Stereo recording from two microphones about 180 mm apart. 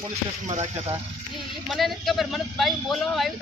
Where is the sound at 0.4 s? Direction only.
40° right (ahead or behind).